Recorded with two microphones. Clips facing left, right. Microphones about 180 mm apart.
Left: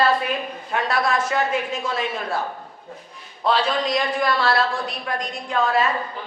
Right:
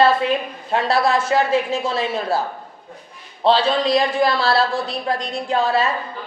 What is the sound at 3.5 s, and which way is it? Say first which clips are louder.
A woman's voice: right 5 dB; 30° right (ahead or behind).